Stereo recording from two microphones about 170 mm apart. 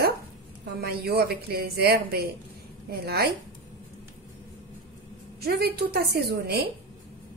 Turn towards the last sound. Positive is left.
turn(degrees=-70)  # may be behind; listen again after turning